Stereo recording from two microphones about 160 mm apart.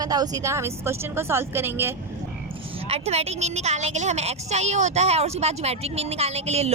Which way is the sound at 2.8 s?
40° right (ahead or behind).